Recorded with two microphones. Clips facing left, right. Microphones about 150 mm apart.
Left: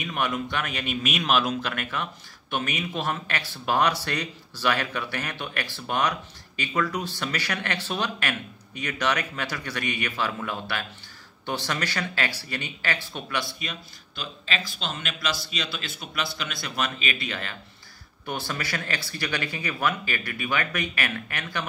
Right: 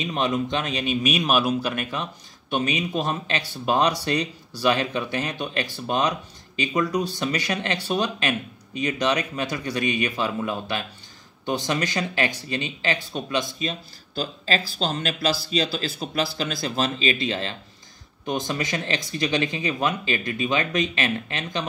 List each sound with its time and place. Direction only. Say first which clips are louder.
0.0 s speech: right 4 dB; 25° right (ahead or behind)
13.6 s speech: right 7 dB; 30° right (ahead or behind)
18.2 s speech: right 5 dB; 15° right (ahead or behind)